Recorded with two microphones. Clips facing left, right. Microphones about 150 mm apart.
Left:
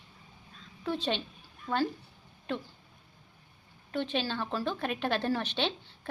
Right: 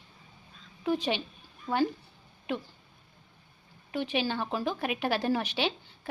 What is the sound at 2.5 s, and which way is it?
Speech, 10° right (ahead or behind).